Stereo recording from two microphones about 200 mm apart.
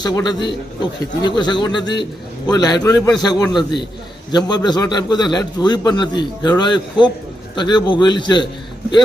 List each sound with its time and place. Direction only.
0.0 s a man's voice: 20° left (ahead or behind)